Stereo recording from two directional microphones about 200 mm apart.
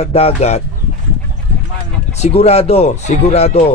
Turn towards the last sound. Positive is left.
turn(degrees=30)  # may be behind; listen again after turning